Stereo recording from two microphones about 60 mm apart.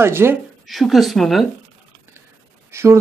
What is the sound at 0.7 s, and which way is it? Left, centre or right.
Speech, centre.